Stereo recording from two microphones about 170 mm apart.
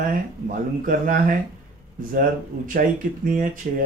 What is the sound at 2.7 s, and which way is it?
Speech, 55° right (ahead or behind).